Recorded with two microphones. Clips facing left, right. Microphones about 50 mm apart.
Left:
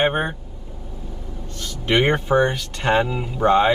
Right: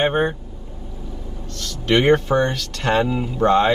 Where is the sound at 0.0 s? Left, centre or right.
Centre.